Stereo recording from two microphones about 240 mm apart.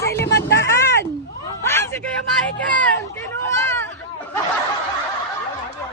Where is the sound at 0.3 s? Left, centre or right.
Left.